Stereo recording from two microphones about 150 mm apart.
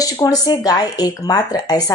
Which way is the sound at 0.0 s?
25° left (ahead or behind).